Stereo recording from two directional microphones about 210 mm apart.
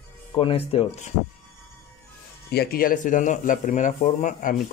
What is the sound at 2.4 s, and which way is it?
Speech, 45° left (ahead or behind).